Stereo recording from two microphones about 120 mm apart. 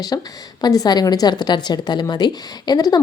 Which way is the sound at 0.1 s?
30° left (ahead or behind).